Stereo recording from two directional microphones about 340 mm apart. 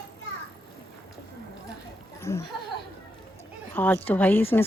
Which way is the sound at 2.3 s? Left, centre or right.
Centre.